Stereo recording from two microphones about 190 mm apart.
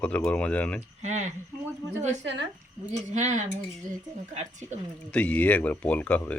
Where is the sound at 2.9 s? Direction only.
40° right (ahead or behind).